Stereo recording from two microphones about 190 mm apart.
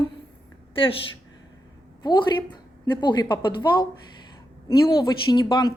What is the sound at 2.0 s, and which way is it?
A woman's voice, 25° left (ahead or behind).